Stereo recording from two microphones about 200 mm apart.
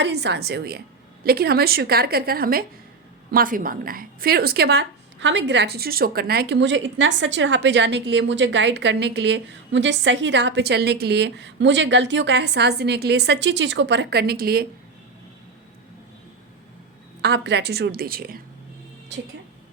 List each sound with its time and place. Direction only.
0.0 s a woman's voice: 60° right (ahead or behind)
17.2 s a woman's voice: 55° right (ahead or behind)